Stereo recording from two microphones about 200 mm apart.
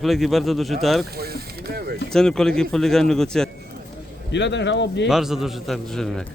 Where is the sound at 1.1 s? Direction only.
50° right (ahead or behind).